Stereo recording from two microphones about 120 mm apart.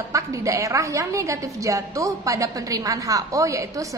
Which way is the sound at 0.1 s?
25° right (ahead or behind).